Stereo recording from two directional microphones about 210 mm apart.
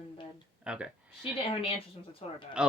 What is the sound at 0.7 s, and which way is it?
Speech, 5° right (ahead or behind).